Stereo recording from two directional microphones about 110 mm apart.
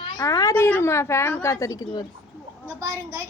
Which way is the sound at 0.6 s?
20° left (ahead or behind).